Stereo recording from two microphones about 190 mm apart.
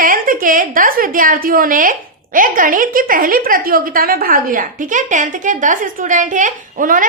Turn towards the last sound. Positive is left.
turn(degrees=-45)  # may be behind; listen again after turning